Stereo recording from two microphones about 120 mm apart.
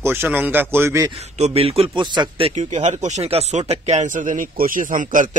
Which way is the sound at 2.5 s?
65° right (ahead or behind).